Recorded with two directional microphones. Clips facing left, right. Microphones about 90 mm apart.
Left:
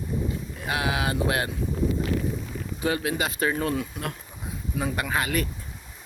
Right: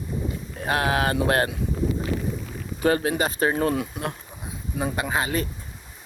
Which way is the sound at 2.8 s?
40° right (ahead or behind).